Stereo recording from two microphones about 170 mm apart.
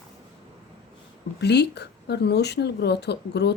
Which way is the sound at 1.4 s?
80° left.